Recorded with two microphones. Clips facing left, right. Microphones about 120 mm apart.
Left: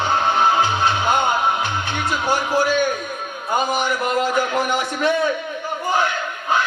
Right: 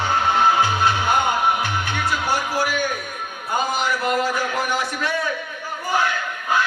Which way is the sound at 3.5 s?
20° left (ahead or behind).